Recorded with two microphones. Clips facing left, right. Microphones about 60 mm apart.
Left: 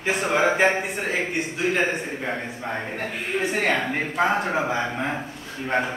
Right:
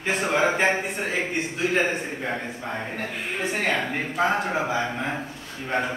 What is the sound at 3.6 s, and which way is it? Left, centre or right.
Speech, centre.